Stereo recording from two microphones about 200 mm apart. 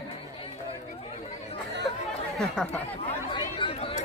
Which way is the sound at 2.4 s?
Centre (ahead or behind).